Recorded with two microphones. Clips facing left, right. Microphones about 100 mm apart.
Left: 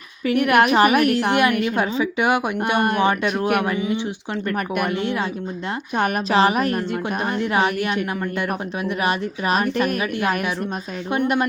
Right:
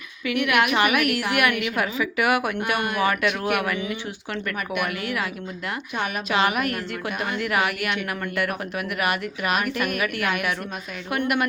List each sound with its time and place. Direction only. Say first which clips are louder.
0.3 s a woman's voice: left 5 dB; 40° left (ahead or behind)
6.3 s a woman's voice: left 4 dB; 35° left (ahead or behind)